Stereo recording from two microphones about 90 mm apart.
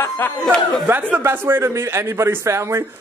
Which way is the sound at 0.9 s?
25° right (ahead or behind).